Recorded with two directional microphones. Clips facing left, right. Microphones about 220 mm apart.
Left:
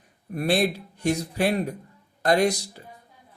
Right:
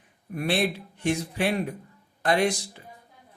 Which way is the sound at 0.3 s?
40° left (ahead or behind).